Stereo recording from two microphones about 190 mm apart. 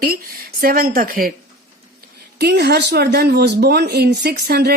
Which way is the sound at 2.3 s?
60° right (ahead or behind).